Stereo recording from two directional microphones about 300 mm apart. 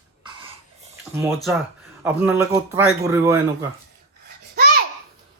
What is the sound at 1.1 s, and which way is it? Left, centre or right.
Speech, centre.